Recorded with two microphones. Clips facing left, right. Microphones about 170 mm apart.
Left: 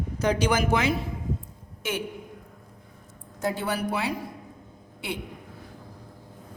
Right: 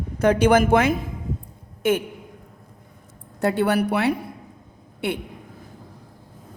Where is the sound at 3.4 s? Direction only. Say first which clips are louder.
Right 8 dB; 65° right (ahead or behind).